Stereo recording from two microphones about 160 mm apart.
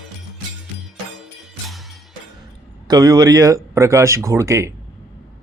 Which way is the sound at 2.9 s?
25° right (ahead or behind).